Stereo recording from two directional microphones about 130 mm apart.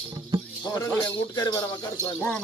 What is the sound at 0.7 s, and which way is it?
Speech, 30° left (ahead or behind).